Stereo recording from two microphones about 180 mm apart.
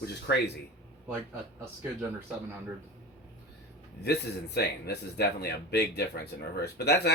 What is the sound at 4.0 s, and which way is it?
Speech, 65° left (ahead or behind).